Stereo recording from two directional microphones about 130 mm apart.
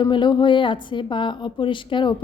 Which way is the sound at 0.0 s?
35° left (ahead or behind).